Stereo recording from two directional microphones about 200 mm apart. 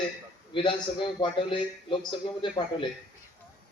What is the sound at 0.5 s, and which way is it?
A man's voice, 25° left (ahead or behind).